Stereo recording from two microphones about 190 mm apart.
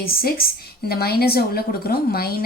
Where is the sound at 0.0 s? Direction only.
50° left (ahead or behind).